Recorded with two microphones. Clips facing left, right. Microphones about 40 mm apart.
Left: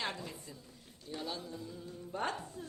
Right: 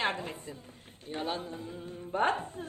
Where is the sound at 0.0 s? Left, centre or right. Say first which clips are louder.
Right 8 dB; right.